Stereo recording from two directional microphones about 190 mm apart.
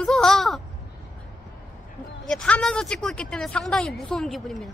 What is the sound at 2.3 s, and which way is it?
A woman's voice, 5° left (ahead or behind).